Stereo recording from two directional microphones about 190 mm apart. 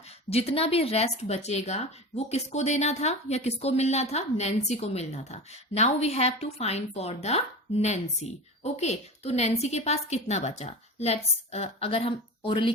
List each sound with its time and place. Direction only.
0.3 s a woman's voice: 30° left (ahead or behind)